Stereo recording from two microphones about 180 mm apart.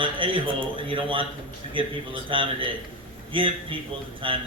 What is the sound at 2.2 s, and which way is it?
A man's voice, 30° right (ahead or behind).